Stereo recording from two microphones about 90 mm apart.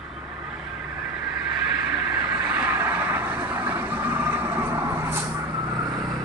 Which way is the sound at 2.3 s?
10° right (ahead or behind).